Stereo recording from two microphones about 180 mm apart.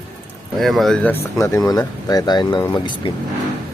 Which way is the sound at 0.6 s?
Centre (ahead or behind).